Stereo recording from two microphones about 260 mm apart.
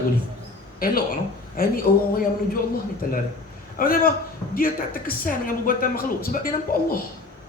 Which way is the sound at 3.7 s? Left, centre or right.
Left.